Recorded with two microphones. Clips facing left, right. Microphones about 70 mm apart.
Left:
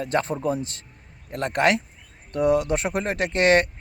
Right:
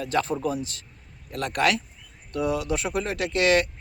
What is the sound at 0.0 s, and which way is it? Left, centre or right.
A man's voice, left.